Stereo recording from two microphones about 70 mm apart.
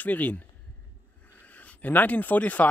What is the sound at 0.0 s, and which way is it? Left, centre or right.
Speech, left.